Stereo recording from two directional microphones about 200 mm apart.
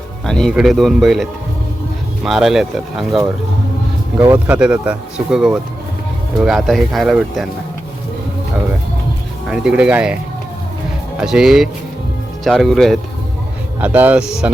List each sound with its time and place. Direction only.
0.3 s speech: 5° left (ahead or behind)
4.2 s speech: 15° right (ahead or behind)
4.5 s speech: 5° right (ahead or behind)
9.5 s speech: 5° right (ahead or behind)
11.2 s speech: centre (ahead or behind)